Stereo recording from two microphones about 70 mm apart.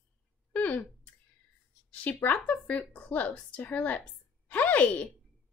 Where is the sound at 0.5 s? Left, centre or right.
Left.